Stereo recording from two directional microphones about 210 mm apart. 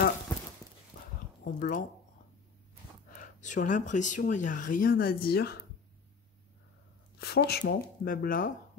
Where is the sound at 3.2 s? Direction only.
35° left (ahead or behind).